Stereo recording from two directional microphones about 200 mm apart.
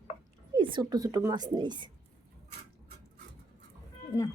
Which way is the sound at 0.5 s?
20° right (ahead or behind).